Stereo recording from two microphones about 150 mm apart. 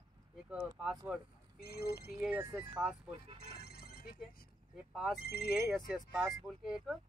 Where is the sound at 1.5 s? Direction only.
90° left.